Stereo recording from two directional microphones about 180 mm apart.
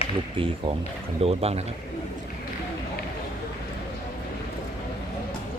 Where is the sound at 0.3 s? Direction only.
30° right (ahead or behind).